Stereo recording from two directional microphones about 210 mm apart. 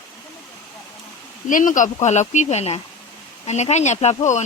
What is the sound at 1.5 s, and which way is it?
Speech, 40° left (ahead or behind).